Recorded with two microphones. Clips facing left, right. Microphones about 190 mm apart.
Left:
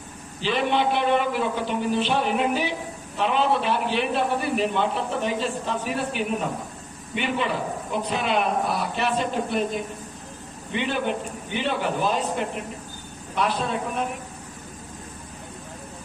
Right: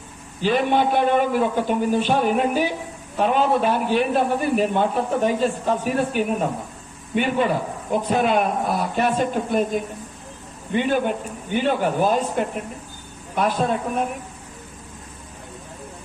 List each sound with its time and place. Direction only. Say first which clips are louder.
0.4 s a man's voice: right 4 dB; 45° right (ahead or behind)
10.7 s a man's voice: right 5 dB; 45° right (ahead or behind)